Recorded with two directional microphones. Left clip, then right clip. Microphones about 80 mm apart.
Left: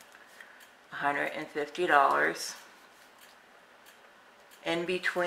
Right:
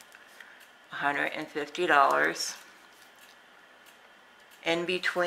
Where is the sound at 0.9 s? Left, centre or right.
Right.